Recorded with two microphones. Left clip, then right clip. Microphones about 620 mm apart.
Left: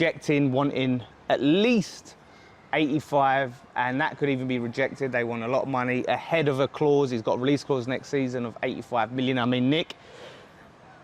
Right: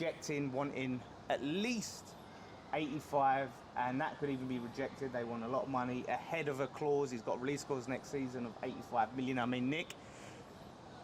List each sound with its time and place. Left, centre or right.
0.0 s speech: left